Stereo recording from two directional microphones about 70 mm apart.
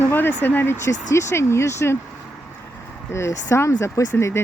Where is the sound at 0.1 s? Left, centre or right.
Left.